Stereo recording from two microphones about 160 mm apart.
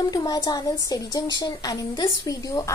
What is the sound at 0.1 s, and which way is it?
Speech, 25° left (ahead or behind).